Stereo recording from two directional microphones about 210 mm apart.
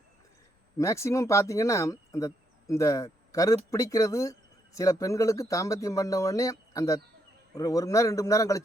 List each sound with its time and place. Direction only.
0.8 s speech: 15° left (ahead or behind)